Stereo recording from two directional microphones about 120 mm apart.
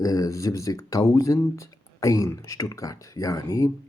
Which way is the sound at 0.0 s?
30° left (ahead or behind).